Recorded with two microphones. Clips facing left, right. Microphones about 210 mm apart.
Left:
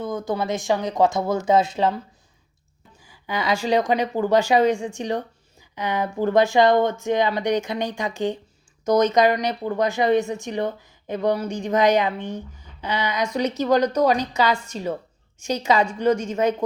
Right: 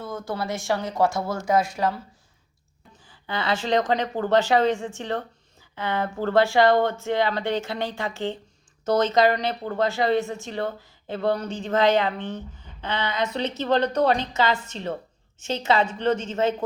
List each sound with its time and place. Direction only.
0.0 s speech: 15° left (ahead or behind)
3.0 s a woman's voice: 10° left (ahead or behind)